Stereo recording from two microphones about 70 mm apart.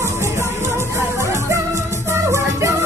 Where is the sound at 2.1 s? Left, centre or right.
Right.